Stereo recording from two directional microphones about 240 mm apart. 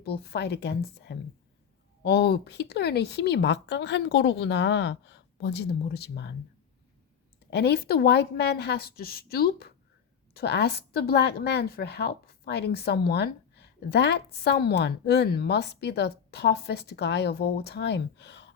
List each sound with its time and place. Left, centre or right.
0.0 s a woman's voice: left
7.5 s a woman's voice: left